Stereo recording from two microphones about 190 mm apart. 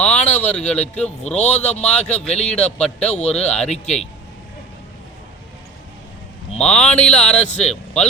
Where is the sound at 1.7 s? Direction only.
35° left (ahead or behind).